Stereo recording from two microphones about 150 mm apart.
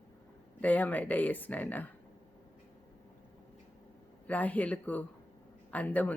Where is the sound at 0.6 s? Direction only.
10° left (ahead or behind).